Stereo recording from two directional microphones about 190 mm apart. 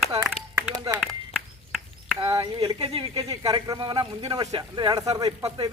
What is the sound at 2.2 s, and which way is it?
Speech, 20° right (ahead or behind).